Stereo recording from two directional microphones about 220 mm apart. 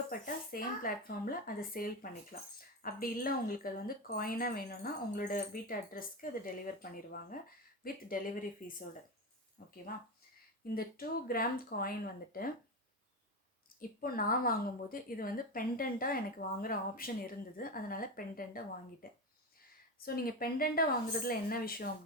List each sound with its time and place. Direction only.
0.1 s speech: 40° left (ahead or behind)
10.8 s speech: 40° left (ahead or behind)
13.7 s speech: 40° left (ahead or behind)